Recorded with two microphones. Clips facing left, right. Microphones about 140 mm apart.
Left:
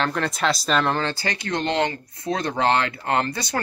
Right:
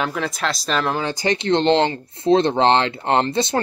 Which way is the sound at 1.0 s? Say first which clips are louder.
Right 6 dB; 20° right (ahead or behind).